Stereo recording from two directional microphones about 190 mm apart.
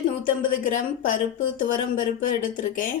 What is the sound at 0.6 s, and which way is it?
A woman's voice, 40° left (ahead or behind).